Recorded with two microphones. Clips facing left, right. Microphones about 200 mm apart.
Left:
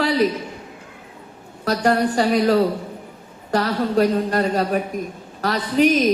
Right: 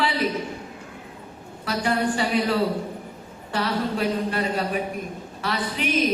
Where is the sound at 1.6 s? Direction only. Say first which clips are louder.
Left 5 dB; 40° left (ahead or behind).